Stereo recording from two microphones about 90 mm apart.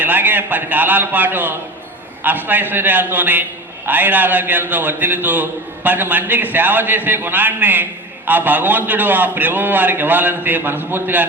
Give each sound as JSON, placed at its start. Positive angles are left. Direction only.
{"t": 0.0, "sound": "a man's voice", "side_deg": -20}